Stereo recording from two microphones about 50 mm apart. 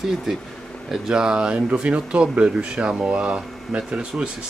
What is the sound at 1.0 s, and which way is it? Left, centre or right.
Speech, centre.